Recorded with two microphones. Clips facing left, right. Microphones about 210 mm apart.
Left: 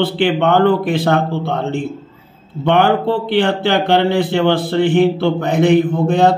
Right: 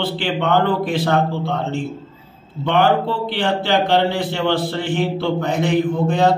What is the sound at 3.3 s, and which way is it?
A man's voice, 55° left (ahead or behind).